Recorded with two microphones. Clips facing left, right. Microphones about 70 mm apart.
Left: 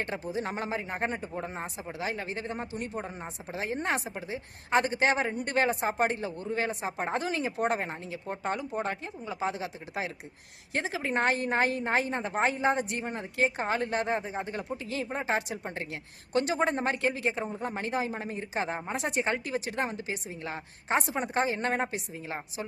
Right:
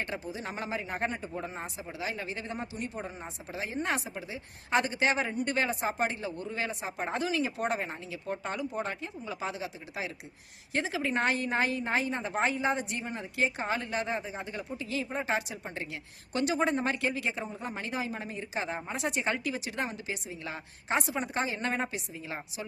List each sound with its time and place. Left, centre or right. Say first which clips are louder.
0.0 s speech: left 4 dB; left
0.9 s a man's voice: left 1 dB; left
1.4 s speech: left 2 dB; left
3.5 s speech: left 2 dB; left
9.6 s speech: left 2 dB; left